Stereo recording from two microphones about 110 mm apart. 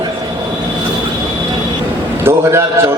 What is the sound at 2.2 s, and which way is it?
Speech, 25° right (ahead or behind).